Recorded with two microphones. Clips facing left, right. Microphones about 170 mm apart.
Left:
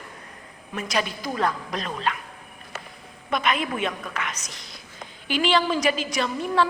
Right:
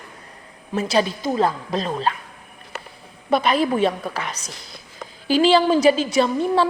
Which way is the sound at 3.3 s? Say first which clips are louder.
Right 7 dB; 35° right (ahead or behind).